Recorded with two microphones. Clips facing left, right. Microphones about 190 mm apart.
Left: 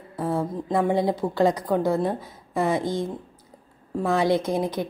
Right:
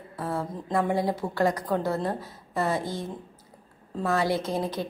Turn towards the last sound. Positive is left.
turn(degrees=15)  # may be behind; listen again after turning